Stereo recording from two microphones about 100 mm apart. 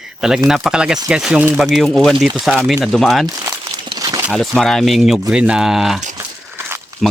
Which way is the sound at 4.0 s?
40° right (ahead or behind).